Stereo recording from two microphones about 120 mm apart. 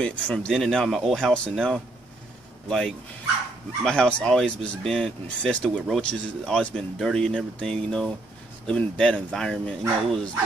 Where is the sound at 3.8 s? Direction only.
5° left (ahead or behind).